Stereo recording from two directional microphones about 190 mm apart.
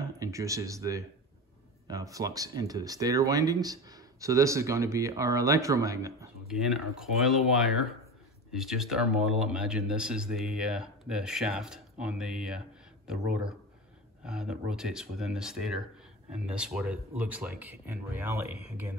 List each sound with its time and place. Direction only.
0.2 s speech: 15° right (ahead or behind)
6.4 s speech: centre (ahead or behind)
8.5 s speech: centre (ahead or behind)